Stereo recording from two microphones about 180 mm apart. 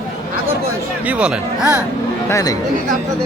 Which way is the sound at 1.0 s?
5° right (ahead or behind).